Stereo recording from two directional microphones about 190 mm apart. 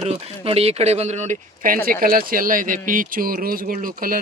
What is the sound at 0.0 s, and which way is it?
Speech, 35° right (ahead or behind).